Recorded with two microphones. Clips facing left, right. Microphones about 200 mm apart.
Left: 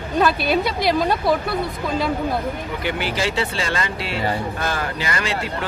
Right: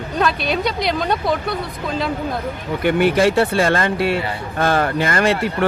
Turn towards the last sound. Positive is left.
turn(degrees=-60)  # may be behind; listen again after turning